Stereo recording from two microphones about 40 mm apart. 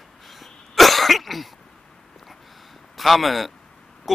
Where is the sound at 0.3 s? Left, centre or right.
Centre.